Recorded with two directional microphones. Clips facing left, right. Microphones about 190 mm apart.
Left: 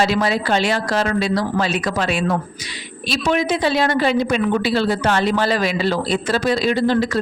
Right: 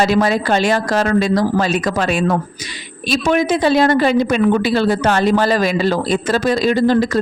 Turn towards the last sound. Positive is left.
turn(degrees=-45)  # may be behind; listen again after turning